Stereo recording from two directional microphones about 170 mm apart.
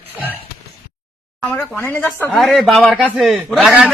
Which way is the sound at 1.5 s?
5° left (ahead or behind).